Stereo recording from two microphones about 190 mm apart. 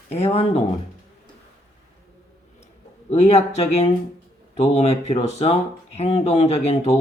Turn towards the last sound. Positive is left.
turn(degrees=35)  # may be behind; listen again after turning